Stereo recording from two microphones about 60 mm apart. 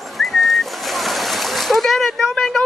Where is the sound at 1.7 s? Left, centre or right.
Centre.